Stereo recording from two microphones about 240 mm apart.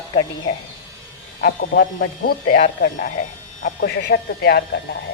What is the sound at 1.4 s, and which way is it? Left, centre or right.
Speech, left.